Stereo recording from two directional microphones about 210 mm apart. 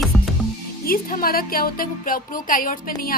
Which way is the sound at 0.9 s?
45° left (ahead or behind).